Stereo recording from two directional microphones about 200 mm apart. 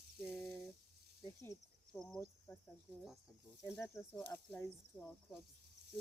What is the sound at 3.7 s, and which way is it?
Speech, centre (ahead or behind).